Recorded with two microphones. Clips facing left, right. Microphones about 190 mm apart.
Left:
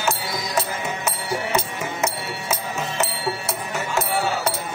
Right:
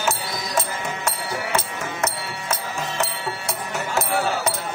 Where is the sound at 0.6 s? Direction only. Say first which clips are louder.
Even; 5° left (ahead or behind).